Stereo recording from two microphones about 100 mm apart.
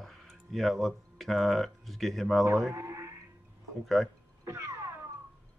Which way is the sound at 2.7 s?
30° right (ahead or behind).